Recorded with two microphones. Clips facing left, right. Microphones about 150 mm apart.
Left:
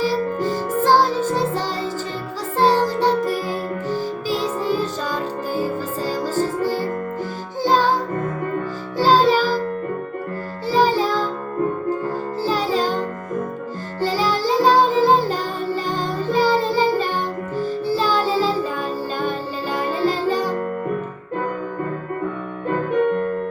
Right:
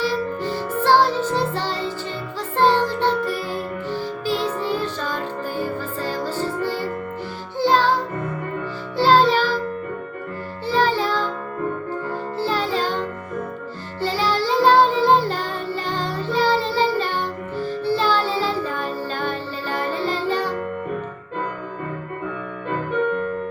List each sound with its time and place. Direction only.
0.0 s music: 40° left (ahead or behind)
10.7 s music: 40° left (ahead or behind)
19.7 s music: 10° left (ahead or behind)
20.0 s music: 40° left (ahead or behind)
22.9 s music: 45° left (ahead or behind)